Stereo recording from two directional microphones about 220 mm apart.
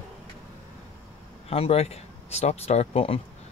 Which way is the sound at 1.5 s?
25° left (ahead or behind).